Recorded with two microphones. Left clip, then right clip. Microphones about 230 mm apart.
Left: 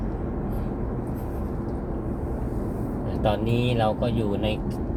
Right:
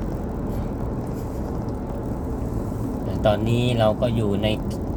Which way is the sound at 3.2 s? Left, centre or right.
Centre.